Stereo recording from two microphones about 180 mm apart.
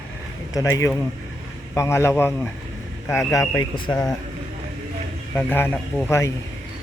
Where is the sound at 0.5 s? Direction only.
20° left (ahead or behind).